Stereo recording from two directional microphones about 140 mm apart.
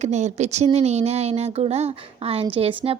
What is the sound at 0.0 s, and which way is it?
A woman's voice, 55° right (ahead or behind).